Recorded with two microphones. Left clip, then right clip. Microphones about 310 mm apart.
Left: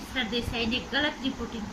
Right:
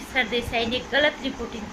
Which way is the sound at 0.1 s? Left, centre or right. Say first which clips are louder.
Right 7 dB; right.